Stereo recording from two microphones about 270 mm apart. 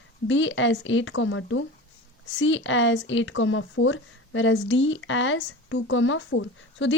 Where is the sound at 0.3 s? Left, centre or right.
Left.